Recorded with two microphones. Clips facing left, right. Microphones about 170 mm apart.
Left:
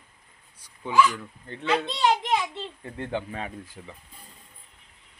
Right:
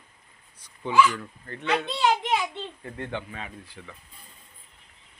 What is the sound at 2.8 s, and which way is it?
Speech, 30° left (ahead or behind).